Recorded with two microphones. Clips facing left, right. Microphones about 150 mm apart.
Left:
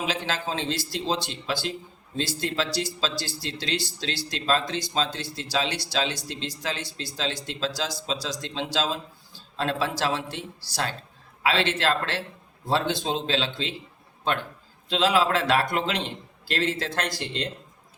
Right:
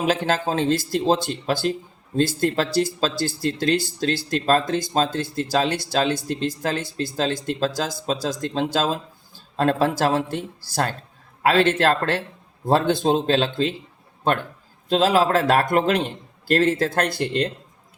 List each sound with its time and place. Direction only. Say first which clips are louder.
0.0 s speech: right 7 dB; 50° right (ahead or behind)